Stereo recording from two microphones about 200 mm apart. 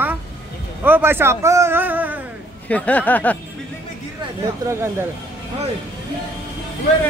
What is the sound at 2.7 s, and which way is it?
Speech, 5° left (ahead or behind).